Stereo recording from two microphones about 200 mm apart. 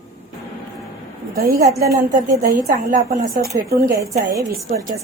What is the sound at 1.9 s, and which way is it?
Speech, 45° right (ahead or behind).